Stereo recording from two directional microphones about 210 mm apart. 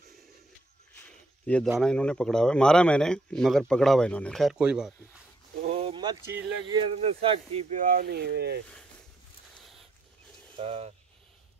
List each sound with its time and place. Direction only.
1.0 s a sound: 5° left (ahead or behind)
1.8 s speech: 5° left (ahead or behind)
5.7 s a sound: 25° right (ahead or behind)
6.6 s speech: 25° right (ahead or behind)
7.7 s speech: 40° right (ahead or behind)
10.6 s speech: 25° right (ahead or behind)